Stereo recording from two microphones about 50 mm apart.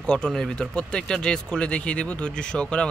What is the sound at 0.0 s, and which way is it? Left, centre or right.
Speech, centre.